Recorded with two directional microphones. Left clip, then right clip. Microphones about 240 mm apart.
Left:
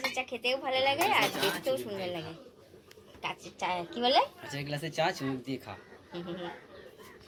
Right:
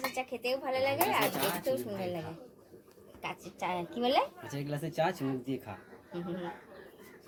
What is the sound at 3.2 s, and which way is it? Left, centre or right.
Speech, centre.